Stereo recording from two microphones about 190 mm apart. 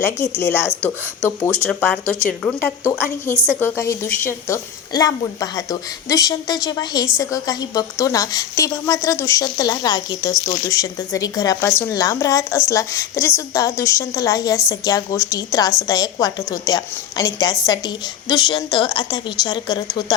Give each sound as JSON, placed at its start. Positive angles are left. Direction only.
{"t": 0.0, "sound": "speech", "side_deg": 15}
{"t": 0.7, "sound": "speech", "side_deg": -10}
{"t": 2.4, "sound": "a woman's voice", "side_deg": 5}